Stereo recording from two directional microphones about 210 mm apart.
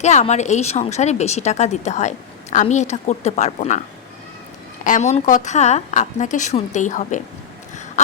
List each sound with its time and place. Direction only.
0.0 s speech: 35° left (ahead or behind)
4.8 s speech: 35° left (ahead or behind)